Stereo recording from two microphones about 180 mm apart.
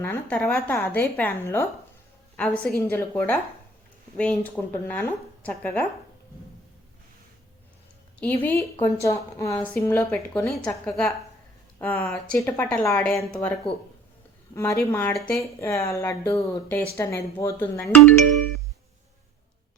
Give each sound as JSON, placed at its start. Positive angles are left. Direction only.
{"t": 0.0, "sound": "speech", "side_deg": 10}
{"t": 8.2, "sound": "speech", "side_deg": 10}
{"t": 13.1, "sound": "a woman's voice", "side_deg": 0}
{"t": 14.5, "sound": "speech", "side_deg": 15}